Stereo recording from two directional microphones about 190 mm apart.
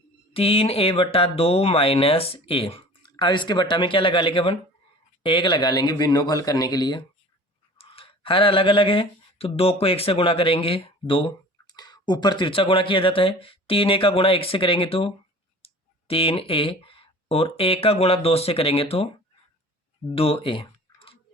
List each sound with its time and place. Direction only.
0.3 s speech: 30° left (ahead or behind)
20.1 s clicking: 30° left (ahead or behind)